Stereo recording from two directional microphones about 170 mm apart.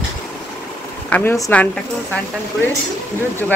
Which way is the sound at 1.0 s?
10° left (ahead or behind).